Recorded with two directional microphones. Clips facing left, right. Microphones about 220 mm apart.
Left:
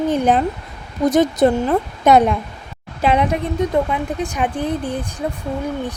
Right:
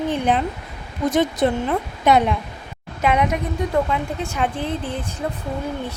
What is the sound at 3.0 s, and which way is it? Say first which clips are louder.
Speech: left 2 dB; 30° left (ahead or behind).